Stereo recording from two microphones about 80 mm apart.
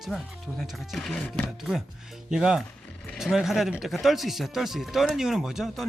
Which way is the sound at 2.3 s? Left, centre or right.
Centre.